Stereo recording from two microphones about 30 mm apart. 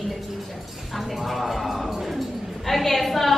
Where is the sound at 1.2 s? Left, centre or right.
Centre.